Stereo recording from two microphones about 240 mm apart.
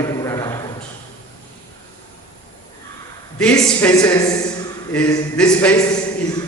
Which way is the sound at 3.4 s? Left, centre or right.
Centre.